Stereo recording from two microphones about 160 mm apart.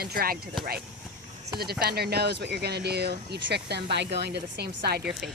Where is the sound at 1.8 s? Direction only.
80° right.